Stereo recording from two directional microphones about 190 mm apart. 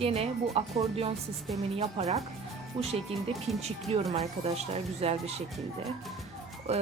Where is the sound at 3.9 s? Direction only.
35° right (ahead or behind).